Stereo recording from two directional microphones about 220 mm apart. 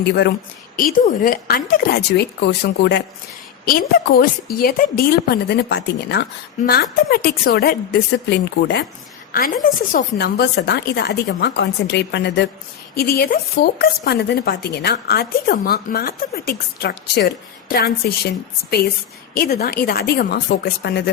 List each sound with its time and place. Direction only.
0.1 s speech: 50° left (ahead or behind)
9.3 s speech: 40° left (ahead or behind)